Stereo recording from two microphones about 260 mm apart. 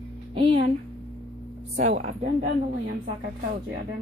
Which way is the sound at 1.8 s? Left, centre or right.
Right.